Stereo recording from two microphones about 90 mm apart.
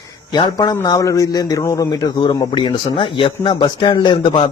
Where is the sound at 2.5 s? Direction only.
70° left (ahead or behind); by 4.3 s 55° left (ahead or behind).